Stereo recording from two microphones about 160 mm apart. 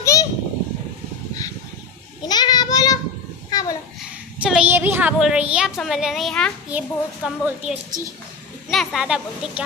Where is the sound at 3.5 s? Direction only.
25° left (ahead or behind).